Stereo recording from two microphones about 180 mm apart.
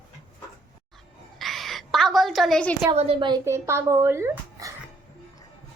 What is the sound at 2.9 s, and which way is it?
Speech, 30° right (ahead or behind).